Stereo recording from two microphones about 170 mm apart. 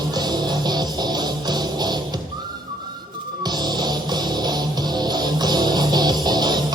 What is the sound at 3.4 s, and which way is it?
Music, 25° right (ahead or behind).